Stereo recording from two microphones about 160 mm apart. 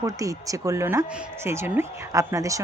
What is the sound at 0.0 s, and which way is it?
A woman's voice, 20° right (ahead or behind).